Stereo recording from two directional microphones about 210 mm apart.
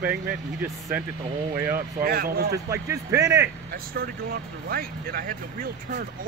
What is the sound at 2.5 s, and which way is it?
Speech, 15° right (ahead or behind).